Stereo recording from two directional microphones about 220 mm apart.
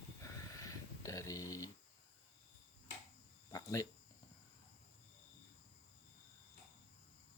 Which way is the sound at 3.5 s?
15° left (ahead or behind).